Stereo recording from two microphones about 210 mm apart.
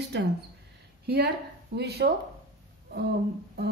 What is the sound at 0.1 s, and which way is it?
A woman's voice, 55° right (ahead or behind).